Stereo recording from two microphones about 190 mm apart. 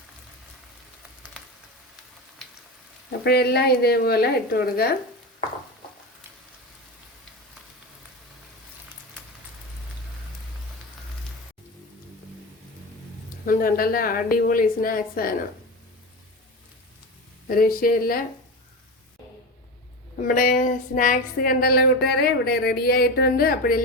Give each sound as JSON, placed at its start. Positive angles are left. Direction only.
{"t": 3.2, "sound": "a woman's voice", "side_deg": 60}
{"t": 13.4, "sound": "speech", "side_deg": 50}
{"t": 17.5, "sound": "speech", "side_deg": 50}
{"t": 20.2, "sound": "speech", "side_deg": 45}